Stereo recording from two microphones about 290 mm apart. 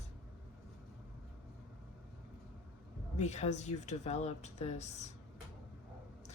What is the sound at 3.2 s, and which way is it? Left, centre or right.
Speech, left.